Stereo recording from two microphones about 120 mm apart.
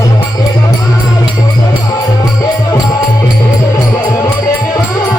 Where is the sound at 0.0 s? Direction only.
30° left (ahead or behind).